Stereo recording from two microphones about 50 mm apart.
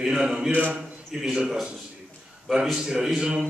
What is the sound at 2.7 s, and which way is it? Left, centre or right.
Speech, centre.